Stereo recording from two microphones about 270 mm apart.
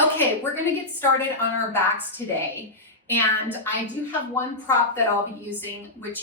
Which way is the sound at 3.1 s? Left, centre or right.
Centre.